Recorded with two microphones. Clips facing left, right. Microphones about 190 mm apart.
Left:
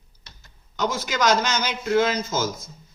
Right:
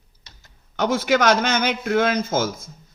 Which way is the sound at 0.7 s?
60° right (ahead or behind).